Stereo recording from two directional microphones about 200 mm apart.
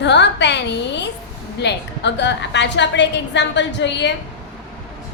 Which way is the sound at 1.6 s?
60° left (ahead or behind).